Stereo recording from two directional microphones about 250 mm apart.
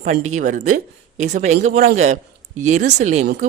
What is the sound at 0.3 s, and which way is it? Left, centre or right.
Speech, right.